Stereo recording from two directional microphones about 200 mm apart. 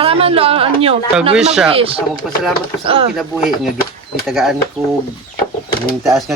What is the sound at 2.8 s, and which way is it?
Speech, 25° right (ahead or behind).